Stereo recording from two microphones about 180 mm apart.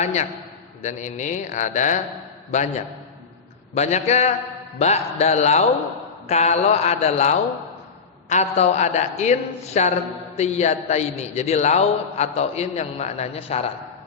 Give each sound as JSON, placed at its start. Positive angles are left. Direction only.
{"t": 0.0, "sound": "a man's voice", "side_deg": 40}